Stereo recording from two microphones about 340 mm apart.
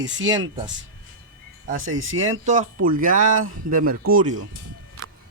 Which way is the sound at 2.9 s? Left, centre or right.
Right.